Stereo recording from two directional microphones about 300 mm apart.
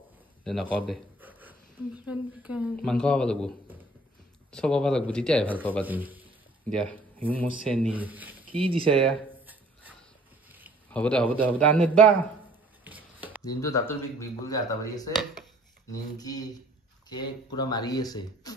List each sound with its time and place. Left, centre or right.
0.4 s a sound: centre
2.0 s a woman's voice: centre
5.9 s a woman's voice: centre
8.5 s speech: centre
9.1 s a sound: centre
11.4 s a woman's voice: centre
12.8 s chopping: centre
13.4 s speech: centre